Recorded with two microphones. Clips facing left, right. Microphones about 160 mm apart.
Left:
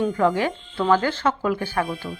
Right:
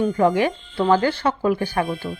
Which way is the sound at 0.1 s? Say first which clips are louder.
Right 3 dB; 15° right (ahead or behind).